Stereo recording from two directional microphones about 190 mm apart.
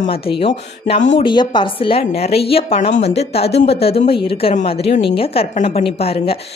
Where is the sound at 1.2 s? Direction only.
25° left (ahead or behind).